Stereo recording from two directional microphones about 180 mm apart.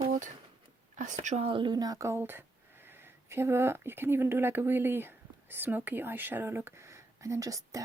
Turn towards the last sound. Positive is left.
turn(degrees=-20)  # may be behind; listen again after turning